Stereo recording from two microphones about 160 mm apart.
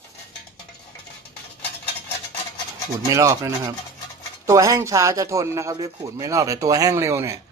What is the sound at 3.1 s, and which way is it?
Speech, 20° right (ahead or behind).